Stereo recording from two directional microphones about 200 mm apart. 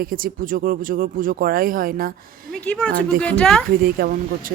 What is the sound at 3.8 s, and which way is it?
Speech, 45° right (ahead or behind).